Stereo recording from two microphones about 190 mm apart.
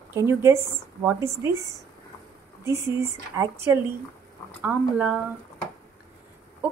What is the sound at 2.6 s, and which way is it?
Speech, 15° right (ahead or behind).